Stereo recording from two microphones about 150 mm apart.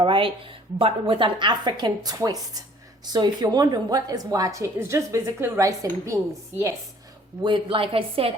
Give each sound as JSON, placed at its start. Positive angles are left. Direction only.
{"t": 0.0, "sound": "a woman's voice", "side_deg": -35}
{"t": 7.4, "sound": "a woman's voice", "side_deg": -35}